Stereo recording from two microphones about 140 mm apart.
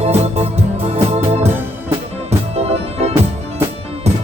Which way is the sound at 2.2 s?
50° right (ahead or behind).